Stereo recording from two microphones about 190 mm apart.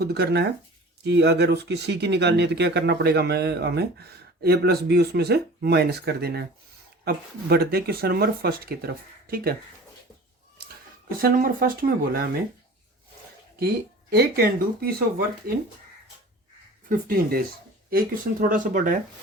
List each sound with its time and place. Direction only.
0.0 s speech: 55° right (ahead or behind)
11.2 s speech: 50° right (ahead or behind)
14.1 s speech: 55° right (ahead or behind)
16.9 s speech: 50° right (ahead or behind)